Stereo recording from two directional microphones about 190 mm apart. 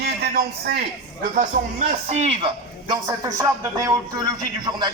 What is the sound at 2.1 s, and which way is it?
Speech, 35° right (ahead or behind).